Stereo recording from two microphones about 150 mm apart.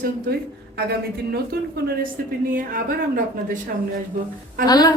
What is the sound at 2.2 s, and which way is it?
Speech, 75° right (ahead or behind).